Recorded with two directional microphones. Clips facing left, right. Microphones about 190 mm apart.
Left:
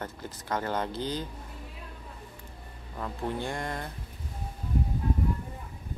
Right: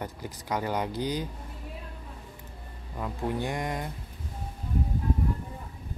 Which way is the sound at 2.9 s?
10° right (ahead or behind).